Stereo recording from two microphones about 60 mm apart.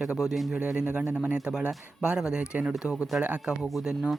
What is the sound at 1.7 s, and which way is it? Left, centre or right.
Speech, centre.